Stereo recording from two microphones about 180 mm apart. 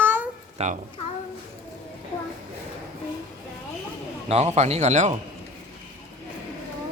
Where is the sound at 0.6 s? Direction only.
40° right (ahead or behind).